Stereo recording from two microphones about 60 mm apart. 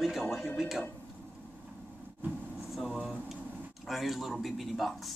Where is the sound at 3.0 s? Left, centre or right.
Centre.